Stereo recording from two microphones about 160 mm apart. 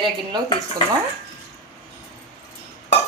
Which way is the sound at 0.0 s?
30° right (ahead or behind).